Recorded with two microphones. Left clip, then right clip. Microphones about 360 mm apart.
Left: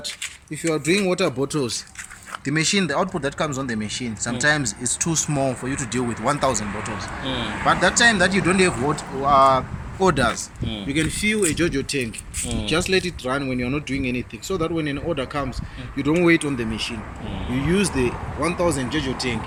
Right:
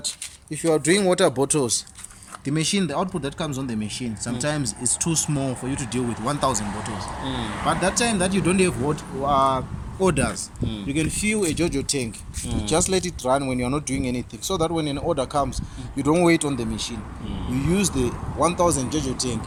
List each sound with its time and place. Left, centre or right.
0.7 s speech: right
2.4 s speech: centre